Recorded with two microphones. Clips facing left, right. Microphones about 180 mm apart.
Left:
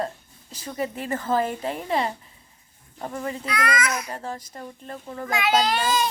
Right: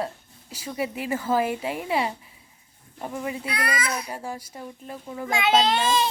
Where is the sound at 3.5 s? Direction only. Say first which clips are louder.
Left 5 dB; 30° right (ahead or behind).